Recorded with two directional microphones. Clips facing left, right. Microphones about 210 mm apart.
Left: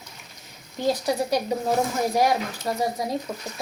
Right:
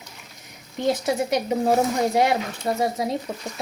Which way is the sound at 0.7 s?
20° right (ahead or behind).